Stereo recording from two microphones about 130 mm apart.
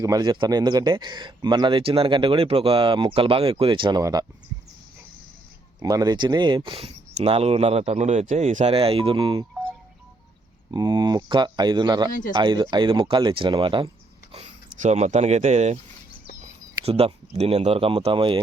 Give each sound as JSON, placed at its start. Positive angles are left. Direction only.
{"t": 0.0, "sound": "speech", "side_deg": -30}
{"t": 4.0, "sound": "speech", "side_deg": -25}
{"t": 5.8, "sound": "speech", "side_deg": -30}
{"t": 10.7, "sound": "speech", "side_deg": -35}
{"t": 14.3, "sound": "speech", "side_deg": -60}
{"t": 16.8, "sound": "speech", "side_deg": -50}